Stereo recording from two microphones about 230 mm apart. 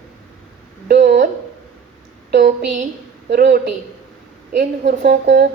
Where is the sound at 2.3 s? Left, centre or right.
Right.